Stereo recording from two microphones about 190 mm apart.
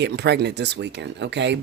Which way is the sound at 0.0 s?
60° right (ahead or behind).